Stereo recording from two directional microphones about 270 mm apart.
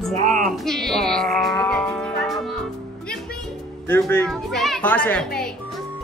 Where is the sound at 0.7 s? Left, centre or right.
Centre.